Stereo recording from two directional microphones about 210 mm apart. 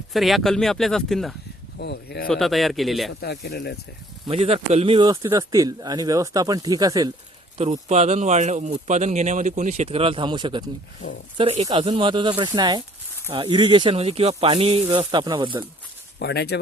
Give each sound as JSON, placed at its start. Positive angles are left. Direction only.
{"t": 0.1, "sound": "speech", "side_deg": 0}
{"t": 1.8, "sound": "speech", "side_deg": 50}
{"t": 2.2, "sound": "speech", "side_deg": 0}
{"t": 3.1, "sound": "speech", "side_deg": 55}
{"t": 4.3, "sound": "speech", "side_deg": -30}
{"t": 7.6, "sound": "speech", "side_deg": -30}
{"t": 16.1, "sound": "speech", "side_deg": 50}